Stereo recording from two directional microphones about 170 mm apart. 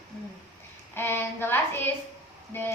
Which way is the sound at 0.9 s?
10° left (ahead or behind).